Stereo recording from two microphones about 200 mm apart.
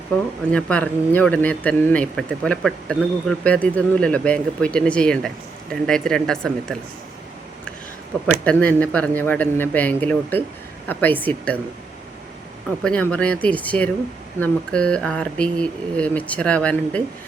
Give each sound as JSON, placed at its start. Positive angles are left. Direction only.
{"t": 0.5, "sound": "speech", "side_deg": 5}
{"t": 8.4, "sound": "speech", "side_deg": 5}
{"t": 12.8, "sound": "speech", "side_deg": 5}